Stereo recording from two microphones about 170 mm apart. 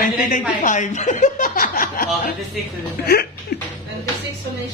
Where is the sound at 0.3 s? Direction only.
50° left (ahead or behind).